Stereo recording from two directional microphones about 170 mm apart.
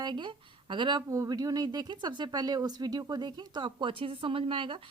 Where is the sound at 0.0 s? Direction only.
25° right (ahead or behind).